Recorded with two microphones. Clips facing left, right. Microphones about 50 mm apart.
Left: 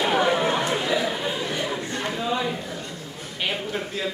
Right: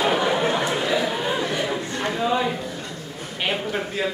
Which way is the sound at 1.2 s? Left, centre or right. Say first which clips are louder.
Right 3 dB; right.